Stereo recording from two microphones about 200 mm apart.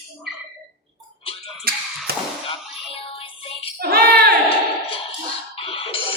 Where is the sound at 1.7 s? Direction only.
50° right (ahead or behind).